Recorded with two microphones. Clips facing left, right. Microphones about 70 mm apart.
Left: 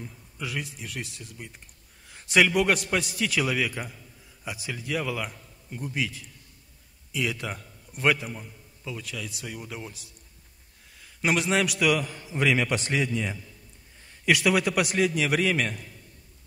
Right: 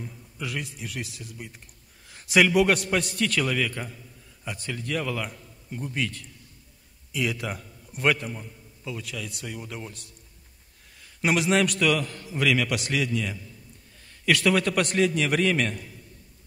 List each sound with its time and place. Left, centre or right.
0.0 s a man's voice: centre
11.1 s a man's voice: centre